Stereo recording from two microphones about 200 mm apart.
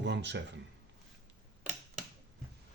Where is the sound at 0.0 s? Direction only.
60° right (ahead or behind).